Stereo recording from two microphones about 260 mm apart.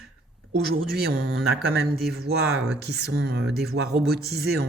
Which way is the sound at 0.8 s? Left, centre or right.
Right.